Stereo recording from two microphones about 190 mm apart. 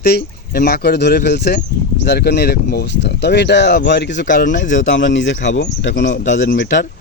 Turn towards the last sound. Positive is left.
turn(degrees=65)  # may be behind; listen again after turning